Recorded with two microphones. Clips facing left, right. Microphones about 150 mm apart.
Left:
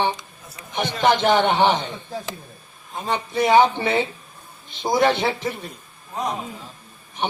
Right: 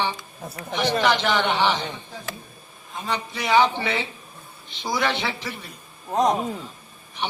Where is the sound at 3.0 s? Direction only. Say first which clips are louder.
Left 6 dB; 50° left (ahead or behind).